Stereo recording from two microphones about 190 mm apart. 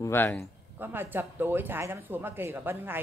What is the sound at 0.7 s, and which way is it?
Speech, 10° right (ahead or behind).